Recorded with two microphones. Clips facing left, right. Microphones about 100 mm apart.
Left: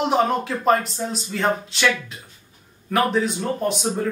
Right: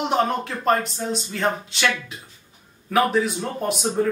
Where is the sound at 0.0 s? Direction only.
Centre (ahead or behind).